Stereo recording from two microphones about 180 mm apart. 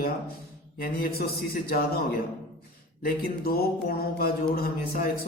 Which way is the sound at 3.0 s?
55° left (ahead or behind).